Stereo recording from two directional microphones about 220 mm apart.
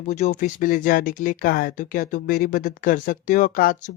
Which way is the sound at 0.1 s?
35° left (ahead or behind).